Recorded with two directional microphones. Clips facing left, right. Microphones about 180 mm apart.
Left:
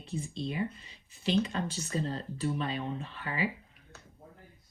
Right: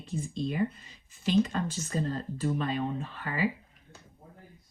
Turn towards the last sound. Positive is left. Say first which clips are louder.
# right 2 dB
turn(degrees=-50)  # may be behind; listen again after turning